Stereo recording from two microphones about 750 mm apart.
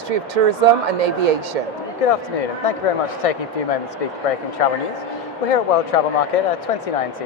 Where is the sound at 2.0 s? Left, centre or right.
Left.